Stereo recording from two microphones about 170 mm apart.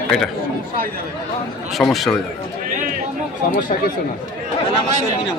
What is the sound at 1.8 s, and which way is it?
Speech, centre (ahead or behind).